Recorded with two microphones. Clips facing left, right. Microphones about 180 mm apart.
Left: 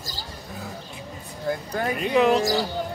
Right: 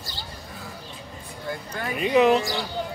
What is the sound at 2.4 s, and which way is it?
Speech, 40° left (ahead or behind).